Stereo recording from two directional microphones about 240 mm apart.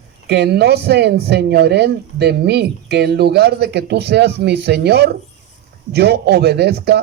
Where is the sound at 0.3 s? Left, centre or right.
Right.